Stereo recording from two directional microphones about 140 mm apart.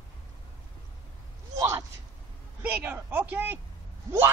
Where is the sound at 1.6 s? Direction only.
25° right (ahead or behind).